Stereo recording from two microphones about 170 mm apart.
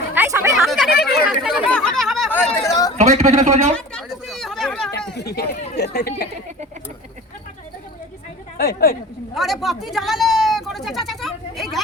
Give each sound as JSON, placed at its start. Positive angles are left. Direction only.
{"t": 0.1, "sound": "a sound", "side_deg": -15}
{"t": 0.5, "sound": "a sound", "side_deg": 0}
{"t": 1.4, "sound": "chatter", "side_deg": 0}
{"t": 2.3, "sound": "chatter", "side_deg": 20}
{"t": 3.0, "sound": "a man's voice", "side_deg": -40}
{"t": 3.8, "sound": "chatter", "side_deg": 0}
{"t": 5.1, "sound": "speech", "side_deg": 70}
{"t": 8.5, "sound": "a woman's voice", "side_deg": 65}
{"t": 9.3, "sound": "speech", "side_deg": 0}